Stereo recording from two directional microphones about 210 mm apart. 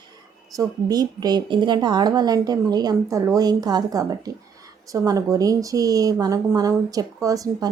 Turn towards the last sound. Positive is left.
turn(degrees=-15)  # may be behind; listen again after turning